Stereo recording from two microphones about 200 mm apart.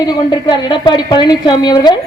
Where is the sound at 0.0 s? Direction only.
20° left (ahead or behind).